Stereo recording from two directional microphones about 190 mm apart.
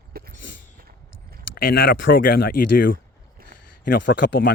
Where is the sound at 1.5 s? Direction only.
55° left (ahead or behind).